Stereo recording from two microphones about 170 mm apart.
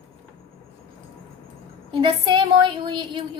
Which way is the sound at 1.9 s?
30° right (ahead or behind).